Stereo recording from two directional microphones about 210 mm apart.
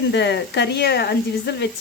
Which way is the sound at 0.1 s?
55° left (ahead or behind).